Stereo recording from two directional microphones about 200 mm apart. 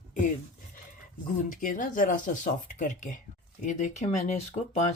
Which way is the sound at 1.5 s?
40° left (ahead or behind).